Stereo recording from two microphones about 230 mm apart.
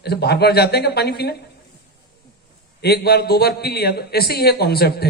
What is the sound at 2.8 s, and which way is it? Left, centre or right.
A man's voice, left.